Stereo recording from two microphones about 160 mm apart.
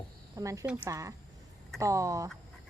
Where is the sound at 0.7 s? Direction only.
10° right (ahead or behind).